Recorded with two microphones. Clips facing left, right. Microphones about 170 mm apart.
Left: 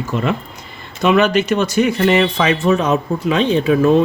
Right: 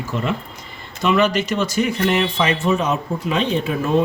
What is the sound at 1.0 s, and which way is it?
Speech, 65° left (ahead or behind).